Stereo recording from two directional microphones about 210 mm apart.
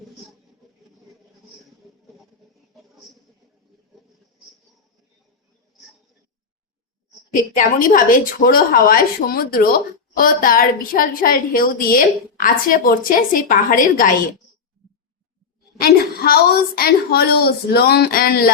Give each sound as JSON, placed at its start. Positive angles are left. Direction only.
{"t": 7.3, "sound": "a woman's voice", "side_deg": 40}
{"t": 14.8, "sound": "clicking", "side_deg": 0}
{"t": 15.8, "sound": "a woman's voice", "side_deg": 45}